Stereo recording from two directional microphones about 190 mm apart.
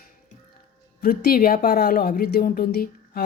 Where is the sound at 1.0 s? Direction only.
50° left (ahead or behind).